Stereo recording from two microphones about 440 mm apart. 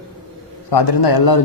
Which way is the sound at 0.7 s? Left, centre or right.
Left.